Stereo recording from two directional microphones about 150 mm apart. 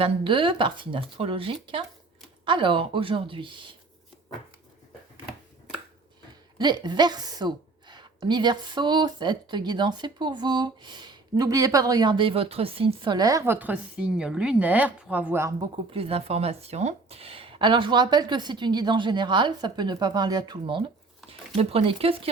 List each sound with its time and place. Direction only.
0.0 s speech: 35° right (ahead or behind)
6.6 s a woman's voice: 30° right (ahead or behind)
15.9 s speech: 40° right (ahead or behind)